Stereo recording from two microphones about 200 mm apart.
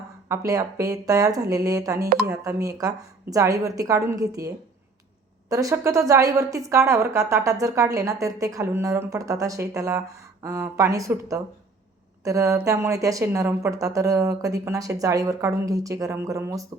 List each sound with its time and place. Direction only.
0.3 s speech: 15° right (ahead or behind)